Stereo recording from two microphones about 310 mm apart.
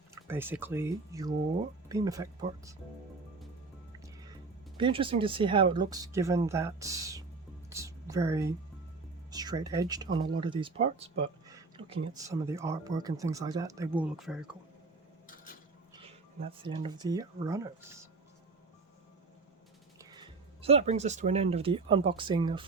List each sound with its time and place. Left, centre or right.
0.1 s speech: centre
4.0 s music: centre
4.8 s a woman's voice: centre
16.0 s speech: centre
20.0 s speech: centre